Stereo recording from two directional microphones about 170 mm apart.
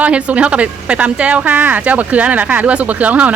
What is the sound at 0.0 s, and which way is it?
Speech, 10° right (ahead or behind).